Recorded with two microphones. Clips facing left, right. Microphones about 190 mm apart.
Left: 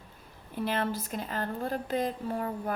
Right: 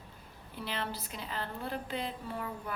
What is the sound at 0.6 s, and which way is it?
A woman's voice, 50° left (ahead or behind).